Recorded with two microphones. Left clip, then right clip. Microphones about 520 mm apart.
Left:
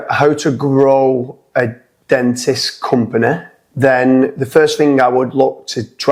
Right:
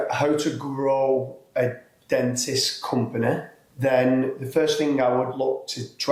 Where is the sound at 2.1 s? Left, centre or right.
Left.